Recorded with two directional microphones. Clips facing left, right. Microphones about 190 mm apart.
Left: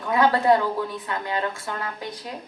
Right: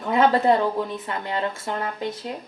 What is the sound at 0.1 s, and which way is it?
A woman's voice, 25° right (ahead or behind).